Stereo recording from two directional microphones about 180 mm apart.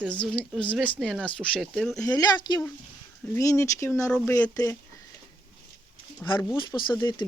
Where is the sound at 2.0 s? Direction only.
20° left (ahead or behind).